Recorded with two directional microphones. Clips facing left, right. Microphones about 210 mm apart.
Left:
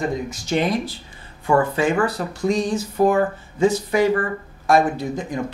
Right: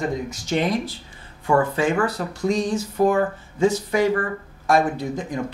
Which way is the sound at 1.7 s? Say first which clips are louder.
Left 1 dB; 20° left (ahead or behind).